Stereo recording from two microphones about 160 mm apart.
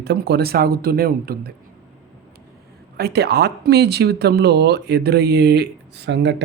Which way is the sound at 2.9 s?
85° right.